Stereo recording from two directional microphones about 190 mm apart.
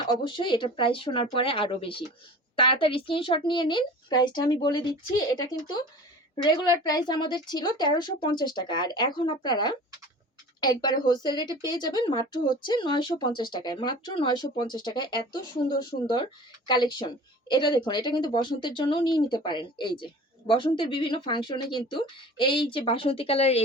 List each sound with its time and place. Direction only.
0.1 s speech: 25° left (ahead or behind)